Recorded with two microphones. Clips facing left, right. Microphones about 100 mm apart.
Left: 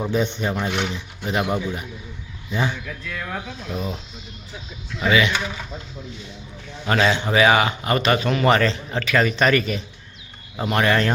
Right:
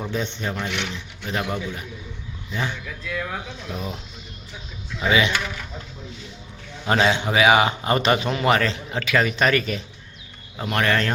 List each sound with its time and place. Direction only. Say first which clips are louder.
0.0 s a man's voice: left 5 dB; 10° left (ahead or behind)
0.7 s speech: left 4 dB; 45° left (ahead or behind)
1.3 s a man's voice: left 4 dB; 15° left (ahead or behind)
2.8 s a man's voice: right 2 dB; centre (ahead or behind)
4.9 s a man's voice: left 1 dB; 20° right (ahead or behind)
6.8 s a man's voice: even; 20° right (ahead or behind)
7.6 s a man's voice: even; 25° right (ahead or behind)
8.4 s a man's voice: left 2 dB; 5° right (ahead or behind); by 11.1 s 10° left (ahead or behind)